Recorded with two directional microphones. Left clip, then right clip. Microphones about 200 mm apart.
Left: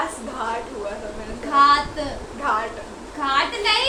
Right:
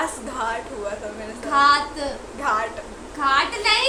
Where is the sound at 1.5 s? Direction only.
5° right (ahead or behind).